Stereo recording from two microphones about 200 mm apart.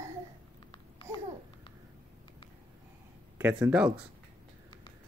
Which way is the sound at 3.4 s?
5° right (ahead or behind).